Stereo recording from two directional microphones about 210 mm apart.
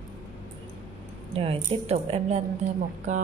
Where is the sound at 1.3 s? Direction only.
25° right (ahead or behind).